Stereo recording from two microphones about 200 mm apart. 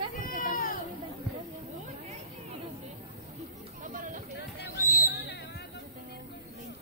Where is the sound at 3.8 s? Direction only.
40° right (ahead or behind).